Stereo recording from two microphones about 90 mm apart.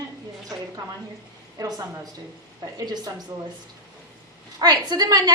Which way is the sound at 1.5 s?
45° right (ahead or behind).